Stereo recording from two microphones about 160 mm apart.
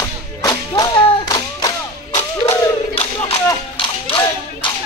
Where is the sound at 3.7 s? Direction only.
30° left (ahead or behind).